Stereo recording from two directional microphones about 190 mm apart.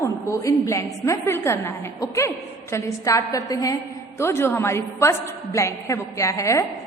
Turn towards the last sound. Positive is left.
turn(degrees=15)  # may be behind; listen again after turning